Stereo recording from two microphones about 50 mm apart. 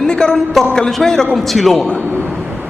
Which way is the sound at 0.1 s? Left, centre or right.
Centre.